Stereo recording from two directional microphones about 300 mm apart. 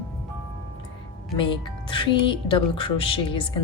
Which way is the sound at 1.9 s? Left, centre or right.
Centre.